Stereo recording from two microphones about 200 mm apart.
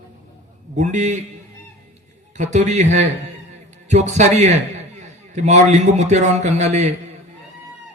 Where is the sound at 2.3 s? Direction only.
35° right (ahead or behind).